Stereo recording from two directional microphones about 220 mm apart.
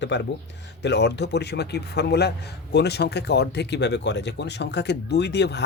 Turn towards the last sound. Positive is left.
turn(degrees=50)  # may be behind; listen again after turning